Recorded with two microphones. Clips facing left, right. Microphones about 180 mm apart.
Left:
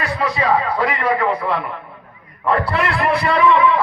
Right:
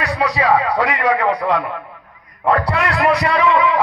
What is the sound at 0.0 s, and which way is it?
A man's voice, 75° right (ahead or behind).